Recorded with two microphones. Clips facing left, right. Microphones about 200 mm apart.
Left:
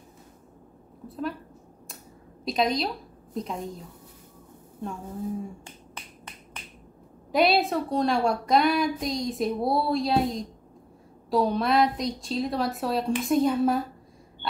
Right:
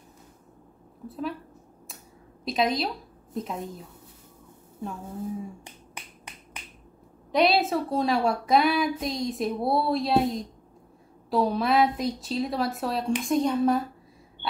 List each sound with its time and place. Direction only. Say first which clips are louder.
1.0 s a woman's voice: even; centre (ahead or behind)
2.4 s a woman's voice: even; centre (ahead or behind)
7.3 s a woman's voice: even; centre (ahead or behind)